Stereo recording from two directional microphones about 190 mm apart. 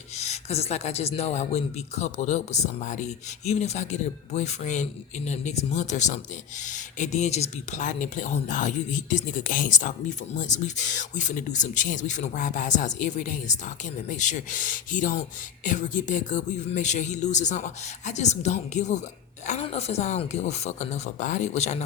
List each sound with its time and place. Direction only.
0.2 s speech: 35° left (ahead or behind)